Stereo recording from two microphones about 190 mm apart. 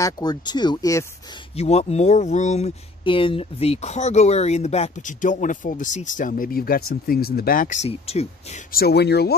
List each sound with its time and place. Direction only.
0.0 s speech: 20° left (ahead or behind)
1.6 s speech: 35° left (ahead or behind)
8.7 s speech: 60° left (ahead or behind)